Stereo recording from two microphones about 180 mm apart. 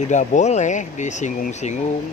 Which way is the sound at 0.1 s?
40° left (ahead or behind).